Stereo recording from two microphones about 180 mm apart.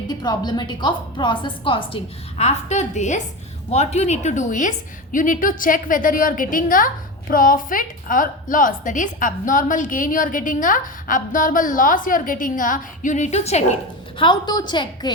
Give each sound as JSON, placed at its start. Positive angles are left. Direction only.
{"t": 0.1, "sound": "a woman's voice", "side_deg": 25}
{"t": 2.4, "sound": "a woman's voice", "side_deg": 40}
{"t": 14.2, "sound": "a woman's voice", "side_deg": 25}